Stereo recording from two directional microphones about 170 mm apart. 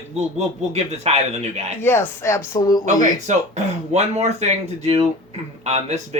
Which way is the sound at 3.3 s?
45° right (ahead or behind).